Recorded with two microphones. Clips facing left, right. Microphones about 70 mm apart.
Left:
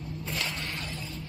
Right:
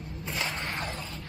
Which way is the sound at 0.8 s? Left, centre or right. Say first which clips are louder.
Right 3 dB; right.